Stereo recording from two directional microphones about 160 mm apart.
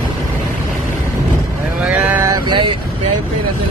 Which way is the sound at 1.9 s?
10° right (ahead or behind).